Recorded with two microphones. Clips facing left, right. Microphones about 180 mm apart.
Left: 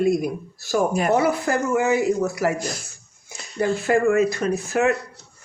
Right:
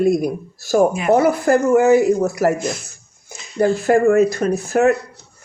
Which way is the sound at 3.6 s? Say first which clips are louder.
Right 5 dB; 40° right (ahead or behind).